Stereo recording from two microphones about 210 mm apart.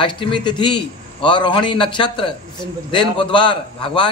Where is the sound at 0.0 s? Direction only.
20° left (ahead or behind).